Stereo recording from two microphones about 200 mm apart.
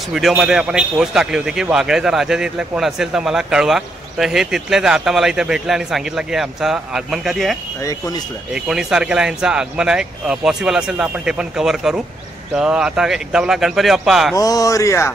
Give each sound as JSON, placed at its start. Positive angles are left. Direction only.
{"t": 0.1, "sound": "a man's voice", "side_deg": 0}
{"t": 8.6, "sound": "a man's voice", "side_deg": -5}
{"t": 14.3, "sound": "speech", "side_deg": 15}